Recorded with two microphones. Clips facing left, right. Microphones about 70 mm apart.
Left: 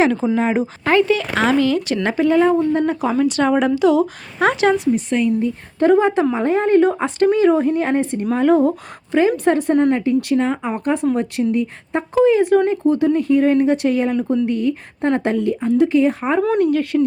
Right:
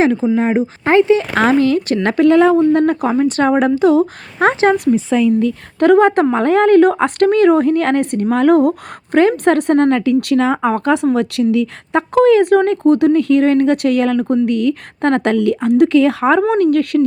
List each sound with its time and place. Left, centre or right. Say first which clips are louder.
0.3 s speech: right 3 dB; right
1.4 s speech: right 4 dB; right
2.0 s speech: right 5 dB; right
2.7 s speech: right 5 dB; right
3.1 s a woman's voice: right 3 dB; right
5.4 s speech: right 3 dB; right
16.9 s speech: right 2 dB; right